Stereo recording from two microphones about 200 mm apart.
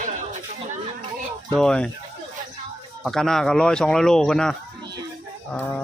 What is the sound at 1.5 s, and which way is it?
Speech, 5° left (ahead or behind).